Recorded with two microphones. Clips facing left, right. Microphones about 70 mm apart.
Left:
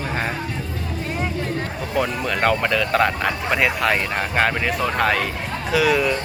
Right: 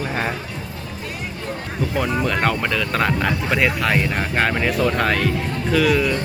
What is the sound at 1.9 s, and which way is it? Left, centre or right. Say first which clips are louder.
Speech: right 1 dB; centre.